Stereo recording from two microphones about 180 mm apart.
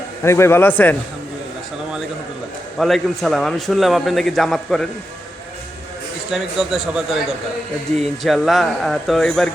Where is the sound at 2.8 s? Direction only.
Centre (ahead or behind).